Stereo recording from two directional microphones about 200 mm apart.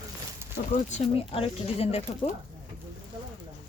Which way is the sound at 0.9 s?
30° left (ahead or behind).